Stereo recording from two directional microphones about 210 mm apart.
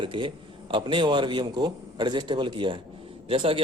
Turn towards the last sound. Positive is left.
turn(degrees=-25)  # may be behind; listen again after turning